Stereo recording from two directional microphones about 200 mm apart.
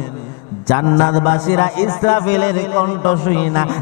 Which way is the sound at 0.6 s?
25° left (ahead or behind).